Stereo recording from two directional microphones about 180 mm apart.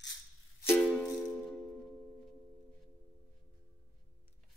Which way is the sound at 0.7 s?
5° left (ahead or behind).